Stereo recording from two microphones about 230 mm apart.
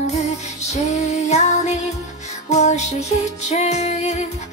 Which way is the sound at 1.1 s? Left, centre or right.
Left.